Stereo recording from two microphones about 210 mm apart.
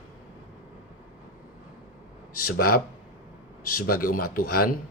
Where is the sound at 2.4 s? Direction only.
45° left (ahead or behind).